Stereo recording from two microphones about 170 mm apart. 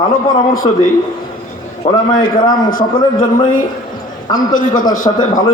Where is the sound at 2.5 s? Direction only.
55° left (ahead or behind).